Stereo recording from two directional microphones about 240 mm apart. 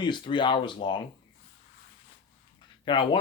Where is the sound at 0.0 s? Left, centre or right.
Centre.